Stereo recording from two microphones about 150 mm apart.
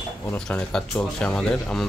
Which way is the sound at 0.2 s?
10° left (ahead or behind).